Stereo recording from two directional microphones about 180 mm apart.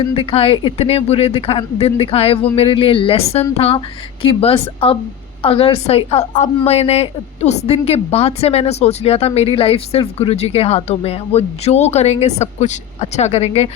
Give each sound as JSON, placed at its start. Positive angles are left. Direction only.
{"t": 0.1, "sound": "a woman's voice", "side_deg": 30}